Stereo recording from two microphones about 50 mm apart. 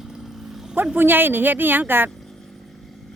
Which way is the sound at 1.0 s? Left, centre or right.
Right.